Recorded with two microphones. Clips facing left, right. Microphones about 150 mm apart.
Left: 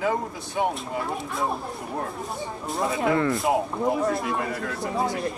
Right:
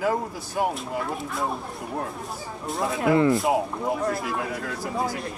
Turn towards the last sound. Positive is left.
turn(degrees=0)  # may be behind; listen again after turning